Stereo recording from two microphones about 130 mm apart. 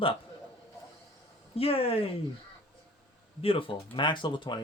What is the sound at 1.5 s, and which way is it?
Speech, 45° left (ahead or behind).